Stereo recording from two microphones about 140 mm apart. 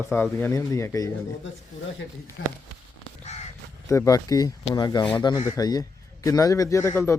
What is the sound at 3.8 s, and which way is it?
Speech, 20° left (ahead or behind).